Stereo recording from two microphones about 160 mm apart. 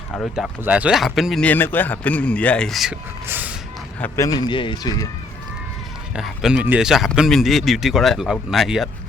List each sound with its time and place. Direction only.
0.6 s speech: 10° right (ahead or behind)
3.2 s snort: 10° right (ahead or behind)
4.0 s a man's voice: 20° left (ahead or behind)
6.1 s speech: centre (ahead or behind)